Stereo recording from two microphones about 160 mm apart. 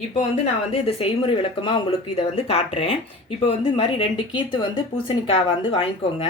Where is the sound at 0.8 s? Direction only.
35° left (ahead or behind).